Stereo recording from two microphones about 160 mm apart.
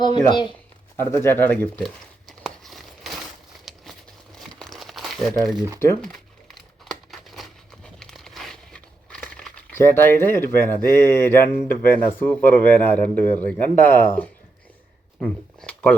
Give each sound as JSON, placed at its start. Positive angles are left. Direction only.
{"t": 0.0, "sound": "speech", "side_deg": 30}
{"t": 0.9, "sound": "speech", "side_deg": 15}
{"t": 1.8, "sound": "crumpling", "side_deg": 0}
{"t": 4.4, "sound": "crumpling", "side_deg": 0}
{"t": 5.4, "sound": "speech", "side_deg": 0}
{"t": 6.0, "sound": "crumpling", "side_deg": 0}
{"t": 11.0, "sound": "speech", "side_deg": 15}
{"t": 15.2, "sound": "a sound", "side_deg": 10}